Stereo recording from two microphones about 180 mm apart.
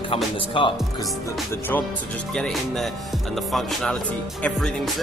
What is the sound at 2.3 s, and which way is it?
Speech, 5° left (ahead or behind).